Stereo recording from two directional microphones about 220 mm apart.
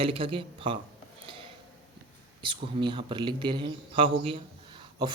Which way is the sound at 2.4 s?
20° right (ahead or behind).